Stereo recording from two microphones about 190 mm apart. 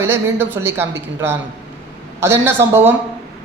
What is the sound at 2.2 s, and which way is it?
Speech, 10° right (ahead or behind).